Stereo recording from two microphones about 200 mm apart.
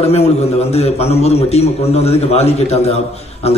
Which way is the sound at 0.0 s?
30° left (ahead or behind).